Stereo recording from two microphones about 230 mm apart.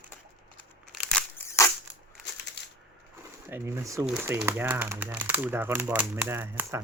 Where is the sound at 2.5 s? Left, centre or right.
Left.